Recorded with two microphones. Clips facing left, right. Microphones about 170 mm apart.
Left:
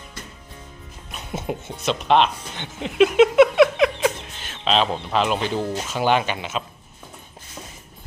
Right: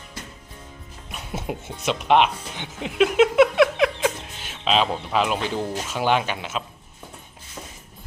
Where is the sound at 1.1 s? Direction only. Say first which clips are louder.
Left 2 dB; 5° right (ahead or behind).